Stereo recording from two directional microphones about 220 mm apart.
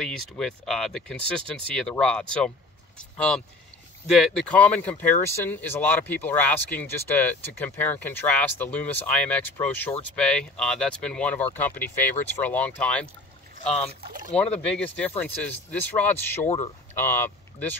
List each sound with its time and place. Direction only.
0.0 s speech: centre (ahead or behind)
14.3 s speech: 5° left (ahead or behind)
16.4 s speech: 25° left (ahead or behind)
16.9 s speech: 10° left (ahead or behind)